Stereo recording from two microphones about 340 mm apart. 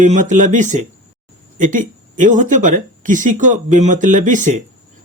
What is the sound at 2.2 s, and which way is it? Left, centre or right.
Speech, right.